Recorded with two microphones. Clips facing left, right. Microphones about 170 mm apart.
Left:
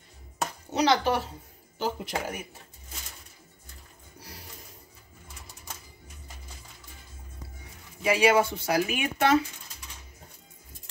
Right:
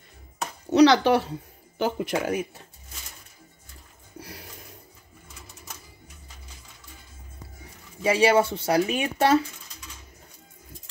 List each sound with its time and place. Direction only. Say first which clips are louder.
0.7 s speech: right 7 dB; 80° right
1.8 s speech: right 5 dB; 65° right (ahead or behind)
8.0 s speech: right 2 dB; 30° right (ahead or behind)